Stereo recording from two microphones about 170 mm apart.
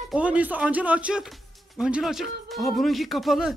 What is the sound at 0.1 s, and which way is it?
Speech, 5° right (ahead or behind).